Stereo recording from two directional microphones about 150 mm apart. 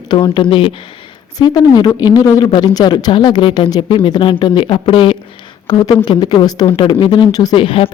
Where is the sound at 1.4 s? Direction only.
25° left (ahead or behind).